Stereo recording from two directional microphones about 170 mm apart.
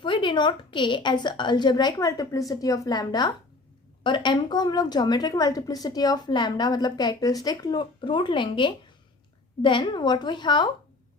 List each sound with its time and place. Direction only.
0.0 s a woman's voice: 30° left (ahead or behind)